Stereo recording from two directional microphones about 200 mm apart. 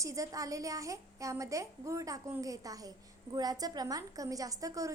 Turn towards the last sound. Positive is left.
turn(degrees=-15)  # may be behind; listen again after turning